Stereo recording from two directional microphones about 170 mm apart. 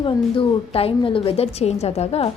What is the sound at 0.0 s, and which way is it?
A woman's voice, 35° left (ahead or behind).